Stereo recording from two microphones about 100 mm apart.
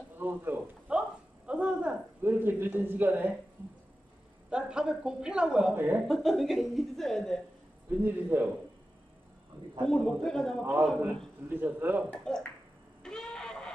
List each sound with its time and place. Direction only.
0.2 s a sound: 20° right (ahead or behind)
4.5 s a woman's voice: 10° right (ahead or behind)
5.8 s a man's voice: 20° right (ahead or behind)
6.0 s speech: centre (ahead or behind)
8.0 s a man's voice: 20° right (ahead or behind)
9.8 s speech: 5° left (ahead or behind)
10.6 s a man's voice: 20° right (ahead or behind)
12.1 s speech: 5° left (ahead or behind)
13.0 s a sound: 5° left (ahead or behind)